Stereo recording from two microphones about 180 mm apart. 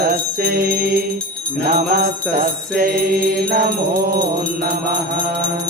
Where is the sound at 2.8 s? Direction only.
55° right (ahead or behind).